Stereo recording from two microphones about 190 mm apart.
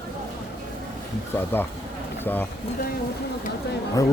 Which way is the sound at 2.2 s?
10° left (ahead or behind).